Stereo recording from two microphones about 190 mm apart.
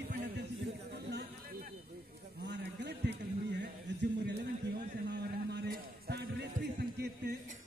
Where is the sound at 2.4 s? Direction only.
65° right (ahead or behind).